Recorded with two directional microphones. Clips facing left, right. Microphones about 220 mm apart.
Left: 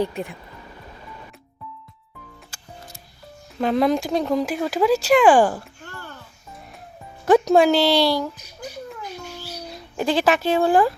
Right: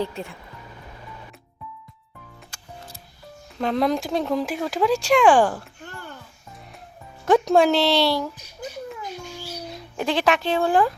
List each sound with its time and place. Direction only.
0.0 s speech: 15° left (ahead or behind)
3.6 s speech: centre (ahead or behind)
5.8 s oink: 15° right (ahead or behind)
7.3 s speech: 5° left (ahead or behind)
10.0 s speech: centre (ahead or behind)